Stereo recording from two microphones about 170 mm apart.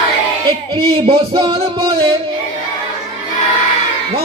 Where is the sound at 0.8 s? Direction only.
35° right (ahead or behind).